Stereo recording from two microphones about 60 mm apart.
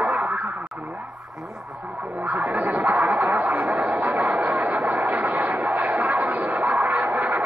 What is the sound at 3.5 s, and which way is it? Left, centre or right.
Vehicle, right.